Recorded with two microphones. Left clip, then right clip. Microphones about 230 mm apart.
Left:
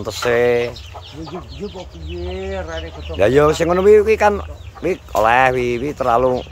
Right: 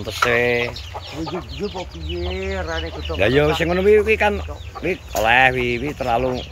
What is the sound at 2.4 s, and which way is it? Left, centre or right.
Speech, centre.